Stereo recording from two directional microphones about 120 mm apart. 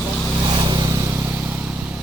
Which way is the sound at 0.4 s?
40° right (ahead or behind).